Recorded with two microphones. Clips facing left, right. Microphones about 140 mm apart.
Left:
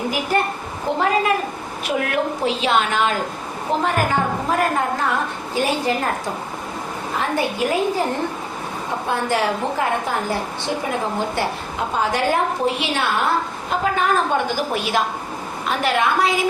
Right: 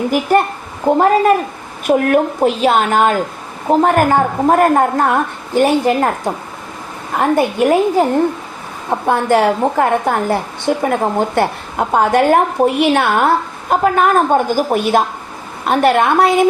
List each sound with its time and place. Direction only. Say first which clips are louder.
0.9 s a woman's voice: right 8 dB; 45° right (ahead or behind)
7.2 s a woman's voice: right 8 dB; 50° right (ahead or behind)
8.9 s a woman's voice: right 8 dB; 55° right (ahead or behind)